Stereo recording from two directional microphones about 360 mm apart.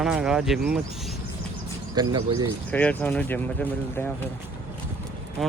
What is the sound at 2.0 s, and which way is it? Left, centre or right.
Speech, centre.